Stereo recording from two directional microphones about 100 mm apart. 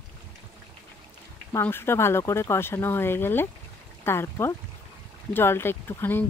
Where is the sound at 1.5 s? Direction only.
25° left (ahead or behind).